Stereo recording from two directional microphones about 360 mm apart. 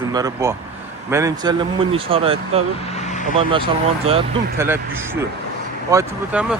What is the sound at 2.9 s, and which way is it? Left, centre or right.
Vehicle, centre.